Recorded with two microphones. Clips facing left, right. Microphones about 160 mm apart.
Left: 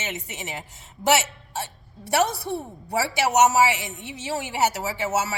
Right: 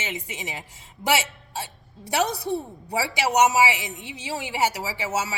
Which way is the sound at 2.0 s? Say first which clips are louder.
Left 2 dB; 15° right (ahead or behind).